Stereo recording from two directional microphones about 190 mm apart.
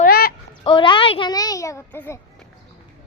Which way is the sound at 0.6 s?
25° left (ahead or behind).